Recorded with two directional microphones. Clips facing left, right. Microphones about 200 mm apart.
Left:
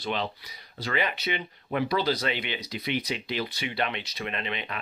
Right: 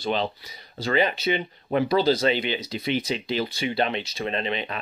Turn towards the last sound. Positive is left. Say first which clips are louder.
# right 6 dB
turn(degrees=-30)  # may be behind; listen again after turning